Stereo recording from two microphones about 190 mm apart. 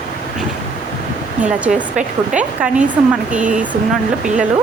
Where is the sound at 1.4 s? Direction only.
5° right (ahead or behind).